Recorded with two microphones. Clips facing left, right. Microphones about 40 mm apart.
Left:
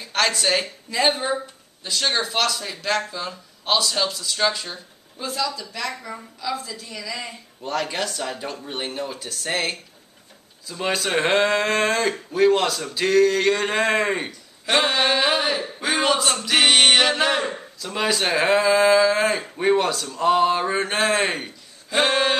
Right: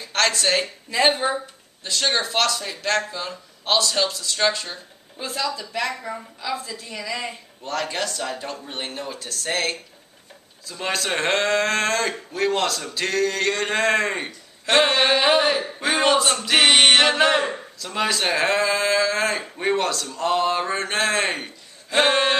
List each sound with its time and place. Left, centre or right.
0.0 s a woman's voice: centre
7.6 s speech: centre